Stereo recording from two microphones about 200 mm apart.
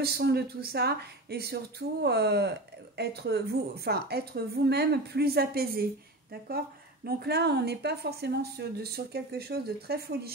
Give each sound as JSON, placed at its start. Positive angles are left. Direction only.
{"t": 0.0, "sound": "speech", "side_deg": -55}
{"t": 7.1, "sound": "speech", "side_deg": -50}